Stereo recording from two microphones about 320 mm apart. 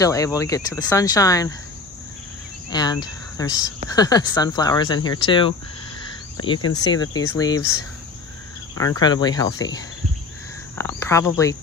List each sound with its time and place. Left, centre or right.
0.0 s speech: centre
2.7 s speech: centre
8.7 s speech: centre